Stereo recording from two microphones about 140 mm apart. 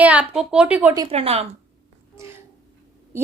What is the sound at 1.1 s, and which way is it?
Speech, 45° right (ahead or behind).